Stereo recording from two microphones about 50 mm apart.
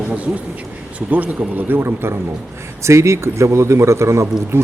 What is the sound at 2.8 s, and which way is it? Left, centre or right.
A man's voice, right.